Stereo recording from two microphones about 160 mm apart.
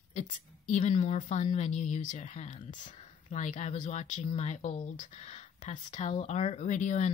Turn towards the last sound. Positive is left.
turn(degrees=50)  # may be behind; listen again after turning